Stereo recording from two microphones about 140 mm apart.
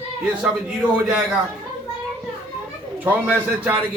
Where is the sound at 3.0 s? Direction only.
10° right (ahead or behind).